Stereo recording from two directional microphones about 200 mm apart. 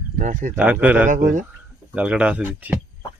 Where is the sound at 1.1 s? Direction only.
40° right (ahead or behind).